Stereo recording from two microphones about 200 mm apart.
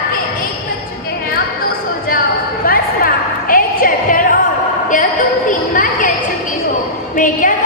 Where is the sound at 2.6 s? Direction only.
45° left (ahead or behind).